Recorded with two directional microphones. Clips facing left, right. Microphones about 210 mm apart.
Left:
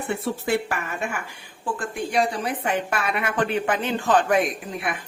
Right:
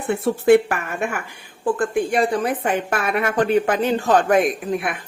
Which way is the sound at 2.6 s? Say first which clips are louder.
Right 3 dB; 45° right (ahead or behind).